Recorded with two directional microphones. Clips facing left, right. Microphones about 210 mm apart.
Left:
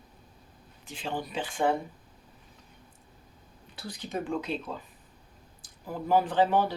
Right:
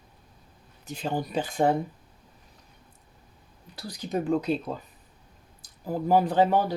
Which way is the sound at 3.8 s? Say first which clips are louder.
Right 5 dB; 40° right (ahead or behind).